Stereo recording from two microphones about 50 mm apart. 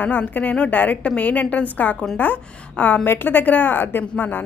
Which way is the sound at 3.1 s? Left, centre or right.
Left.